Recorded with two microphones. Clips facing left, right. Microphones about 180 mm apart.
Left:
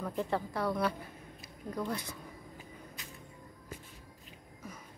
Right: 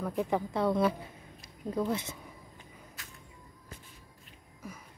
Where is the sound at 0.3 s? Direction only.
20° right (ahead or behind).